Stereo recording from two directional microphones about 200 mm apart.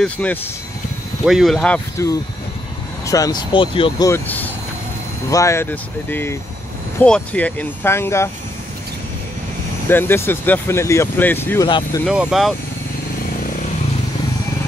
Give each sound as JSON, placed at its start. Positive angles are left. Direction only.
{"t": 0.0, "sound": "speech", "side_deg": 5}
{"t": 3.1, "sound": "speech", "side_deg": 20}
{"t": 4.1, "sound": "speech", "side_deg": 10}
{"t": 9.8, "sound": "speech", "side_deg": 10}
{"t": 11.6, "sound": "speech", "side_deg": 20}
{"t": 12.1, "sound": "speech", "side_deg": 0}